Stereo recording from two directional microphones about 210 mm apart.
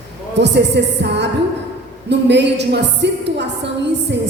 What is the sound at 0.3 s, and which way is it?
A woman's voice, 55° right (ahead or behind).